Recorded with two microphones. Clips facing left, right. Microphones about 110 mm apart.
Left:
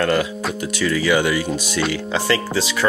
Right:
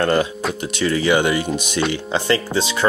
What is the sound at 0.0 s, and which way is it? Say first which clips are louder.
Speech: right 1 dB; 30° right (ahead or behind).